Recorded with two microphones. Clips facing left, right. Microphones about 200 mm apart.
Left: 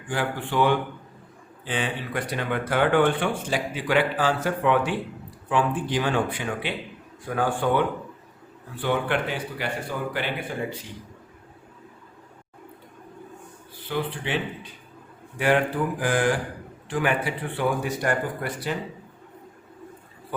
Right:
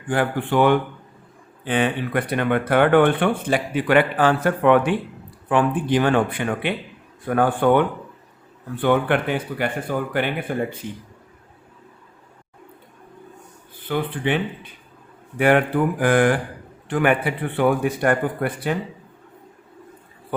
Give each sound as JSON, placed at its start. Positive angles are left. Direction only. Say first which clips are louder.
{"t": 0.1, "sound": "speech", "louder": "right 6 dB", "side_deg": -55}
{"t": 13.8, "sound": "speech", "louder": "right 5 dB", "side_deg": -55}